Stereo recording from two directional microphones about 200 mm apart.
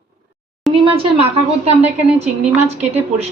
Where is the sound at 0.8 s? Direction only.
25° right (ahead or behind).